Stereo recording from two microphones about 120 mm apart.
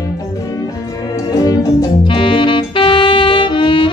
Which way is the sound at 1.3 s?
30° left (ahead or behind).